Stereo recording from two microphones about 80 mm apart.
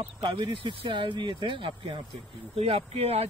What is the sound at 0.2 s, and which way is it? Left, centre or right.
Speech, right.